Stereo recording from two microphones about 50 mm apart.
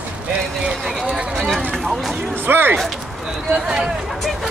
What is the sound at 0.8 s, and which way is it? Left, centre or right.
Speech, centre.